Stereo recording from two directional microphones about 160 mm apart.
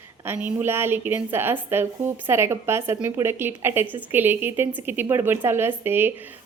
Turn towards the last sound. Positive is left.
turn(degrees=-15)  # may be behind; listen again after turning